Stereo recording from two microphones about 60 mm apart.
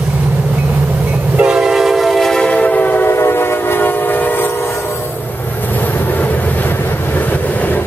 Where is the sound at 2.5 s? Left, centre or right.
Left.